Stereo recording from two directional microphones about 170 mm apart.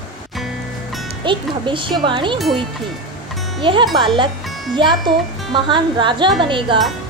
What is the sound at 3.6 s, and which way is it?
Speech, 30° right (ahead or behind).